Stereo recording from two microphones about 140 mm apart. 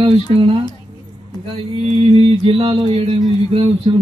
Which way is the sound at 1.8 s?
45° right (ahead or behind).